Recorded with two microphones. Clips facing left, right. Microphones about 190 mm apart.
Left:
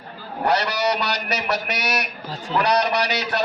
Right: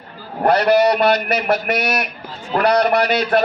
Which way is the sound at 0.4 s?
55° right (ahead or behind).